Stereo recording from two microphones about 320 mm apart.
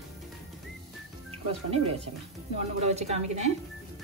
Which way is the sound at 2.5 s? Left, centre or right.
Centre.